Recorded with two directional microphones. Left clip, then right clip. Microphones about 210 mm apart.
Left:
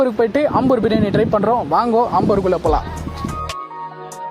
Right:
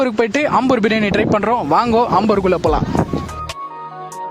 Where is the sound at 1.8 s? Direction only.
90° right.